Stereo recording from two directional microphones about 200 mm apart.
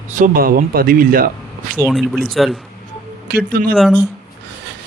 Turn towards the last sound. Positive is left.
turn(degrees=0)  # may be behind; listen again after turning